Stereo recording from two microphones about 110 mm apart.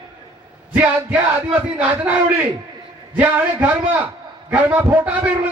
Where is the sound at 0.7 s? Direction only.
15° right (ahead or behind).